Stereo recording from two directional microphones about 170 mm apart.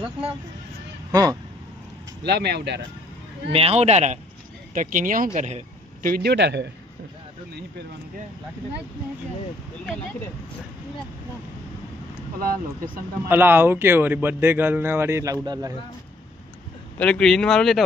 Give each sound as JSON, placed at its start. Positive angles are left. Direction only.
{"t": 1.1, "sound": "speech", "side_deg": -20}
{"t": 2.2, "sound": "a man's voice", "side_deg": -80}
{"t": 3.5, "sound": "speech", "side_deg": -35}
{"t": 6.0, "sound": "a man's voice", "side_deg": -65}
{"t": 12.4, "sound": "speech", "side_deg": -55}
{"t": 13.3, "sound": "a man's voice", "side_deg": -10}
{"t": 17.0, "sound": "speech", "side_deg": 5}